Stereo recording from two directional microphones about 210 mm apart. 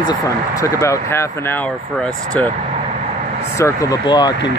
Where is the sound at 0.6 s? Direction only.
15° left (ahead or behind).